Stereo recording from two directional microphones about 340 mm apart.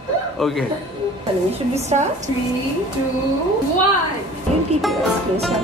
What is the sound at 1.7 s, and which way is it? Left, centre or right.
Speech, centre.